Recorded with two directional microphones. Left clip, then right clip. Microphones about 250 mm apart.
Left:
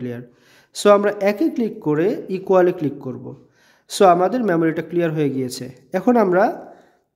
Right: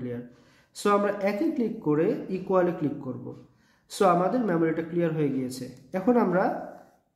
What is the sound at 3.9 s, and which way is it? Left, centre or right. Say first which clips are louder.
Speech: left 9 dB; left.